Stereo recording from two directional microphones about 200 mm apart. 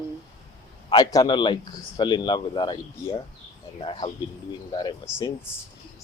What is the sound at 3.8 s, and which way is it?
Speech, 25° left (ahead or behind).